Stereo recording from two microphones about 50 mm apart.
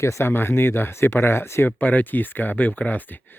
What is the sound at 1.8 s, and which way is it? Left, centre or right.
Speech, left.